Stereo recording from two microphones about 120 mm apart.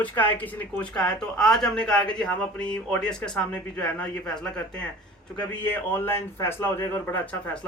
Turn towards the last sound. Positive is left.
turn(degrees=10)  # may be behind; listen again after turning